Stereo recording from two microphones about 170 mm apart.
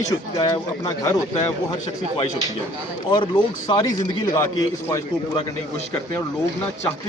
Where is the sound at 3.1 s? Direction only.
25° left (ahead or behind).